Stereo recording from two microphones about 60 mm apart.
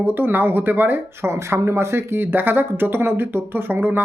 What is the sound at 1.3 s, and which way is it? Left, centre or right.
Speech, right.